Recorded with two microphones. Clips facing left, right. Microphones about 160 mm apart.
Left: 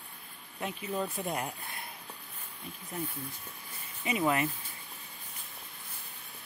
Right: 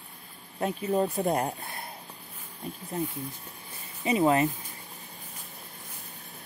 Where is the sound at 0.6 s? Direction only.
40° right (ahead or behind).